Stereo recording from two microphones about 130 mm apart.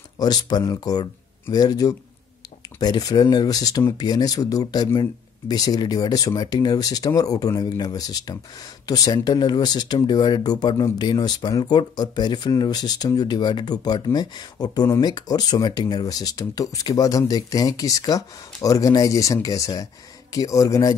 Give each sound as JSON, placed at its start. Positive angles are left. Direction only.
{"t": 0.2, "sound": "speech", "side_deg": 30}